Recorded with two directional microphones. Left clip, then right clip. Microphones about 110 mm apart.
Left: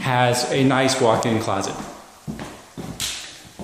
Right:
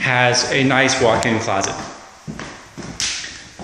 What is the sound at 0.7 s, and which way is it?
Speech, 15° left (ahead or behind).